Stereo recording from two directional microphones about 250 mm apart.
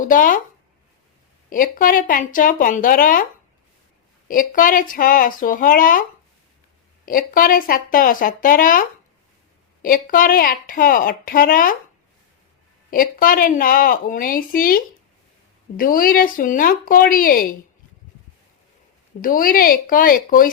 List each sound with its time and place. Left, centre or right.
0.0 s speech: left
1.5 s speech: left
4.3 s speech: left
9.8 s speech: left
12.9 s speech: left
19.2 s speech: left